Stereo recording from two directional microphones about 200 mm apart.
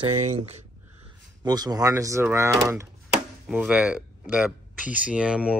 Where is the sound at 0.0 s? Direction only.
30° right (ahead or behind).